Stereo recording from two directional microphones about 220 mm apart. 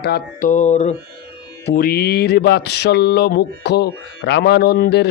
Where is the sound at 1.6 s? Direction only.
45° left (ahead or behind).